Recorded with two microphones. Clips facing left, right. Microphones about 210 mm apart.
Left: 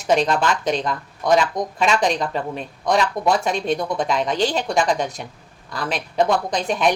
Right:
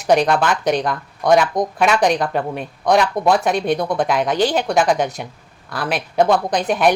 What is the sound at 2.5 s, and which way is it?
A woman's voice, centre (ahead or behind).